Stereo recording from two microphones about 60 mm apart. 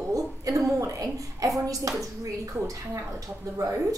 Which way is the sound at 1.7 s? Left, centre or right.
Right.